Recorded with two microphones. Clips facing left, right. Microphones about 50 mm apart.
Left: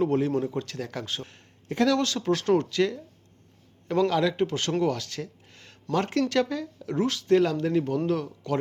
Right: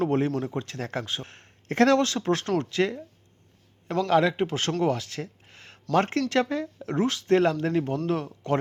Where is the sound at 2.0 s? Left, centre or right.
Right.